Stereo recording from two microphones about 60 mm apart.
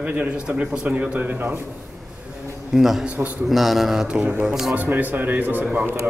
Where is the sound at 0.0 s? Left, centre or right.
Right.